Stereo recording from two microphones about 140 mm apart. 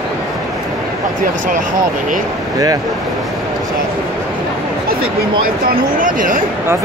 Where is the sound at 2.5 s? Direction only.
25° right (ahead or behind).